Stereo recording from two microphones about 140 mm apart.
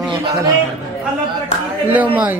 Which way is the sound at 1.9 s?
10° right (ahead or behind).